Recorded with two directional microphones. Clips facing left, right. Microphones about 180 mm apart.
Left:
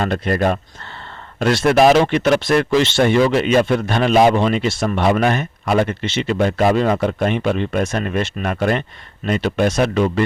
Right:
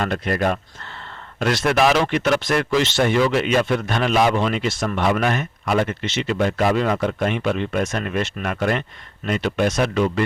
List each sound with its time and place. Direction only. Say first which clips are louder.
0.0 s speech: left 3 dB; 35° left (ahead or behind)